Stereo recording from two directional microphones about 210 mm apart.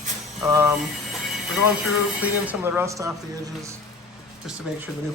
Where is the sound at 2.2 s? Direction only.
10° right (ahead or behind).